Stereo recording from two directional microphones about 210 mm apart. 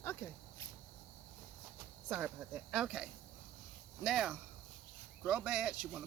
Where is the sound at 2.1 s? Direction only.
5° right (ahead or behind).